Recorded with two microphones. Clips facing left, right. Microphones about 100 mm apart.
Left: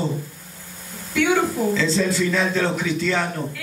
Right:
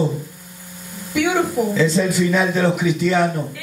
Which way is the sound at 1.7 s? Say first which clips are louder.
Right 3 dB; 15° right (ahead or behind).